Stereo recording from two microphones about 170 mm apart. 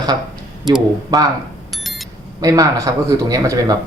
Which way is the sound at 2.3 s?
20° right (ahead or behind).